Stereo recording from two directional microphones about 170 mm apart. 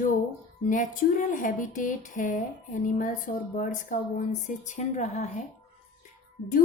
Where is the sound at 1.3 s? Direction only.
50° left (ahead or behind).